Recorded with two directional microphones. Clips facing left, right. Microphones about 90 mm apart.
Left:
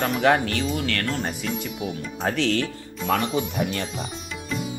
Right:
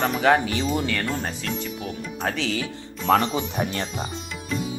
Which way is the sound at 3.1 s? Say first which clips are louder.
Right 3 dB; 40° right (ahead or behind).